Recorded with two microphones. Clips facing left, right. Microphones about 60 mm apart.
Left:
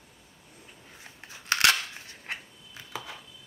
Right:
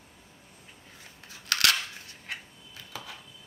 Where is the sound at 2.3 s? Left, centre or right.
Left.